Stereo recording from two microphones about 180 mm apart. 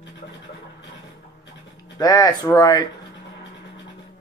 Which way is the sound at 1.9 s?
20° left (ahead or behind).